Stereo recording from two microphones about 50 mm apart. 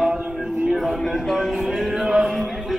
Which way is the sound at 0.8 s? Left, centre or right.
Centre.